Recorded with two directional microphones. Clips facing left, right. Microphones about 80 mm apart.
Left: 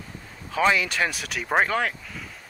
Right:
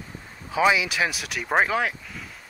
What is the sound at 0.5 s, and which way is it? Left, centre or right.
Speech, centre.